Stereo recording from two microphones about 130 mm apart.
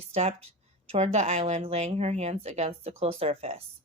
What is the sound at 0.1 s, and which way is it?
A woman's voice, 50° right (ahead or behind).